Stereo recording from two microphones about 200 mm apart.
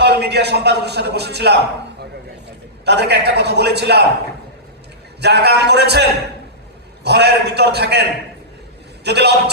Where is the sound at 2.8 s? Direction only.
55° right (ahead or behind).